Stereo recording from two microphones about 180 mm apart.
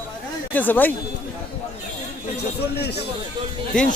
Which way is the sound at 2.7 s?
65° left (ahead or behind).